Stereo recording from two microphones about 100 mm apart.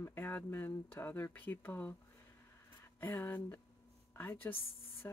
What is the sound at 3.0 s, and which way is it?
Speech, 20° left (ahead or behind).